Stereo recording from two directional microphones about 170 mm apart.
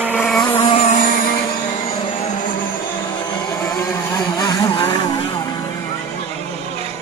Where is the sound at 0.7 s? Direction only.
45° left (ahead or behind).